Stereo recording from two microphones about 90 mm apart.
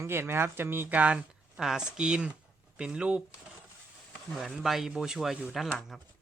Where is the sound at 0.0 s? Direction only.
25° right (ahead or behind); by 3.2 s 10° right (ahead or behind).